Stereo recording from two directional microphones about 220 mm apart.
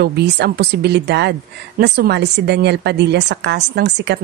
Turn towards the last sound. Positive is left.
turn(degrees=-50)  # may be behind; listen again after turning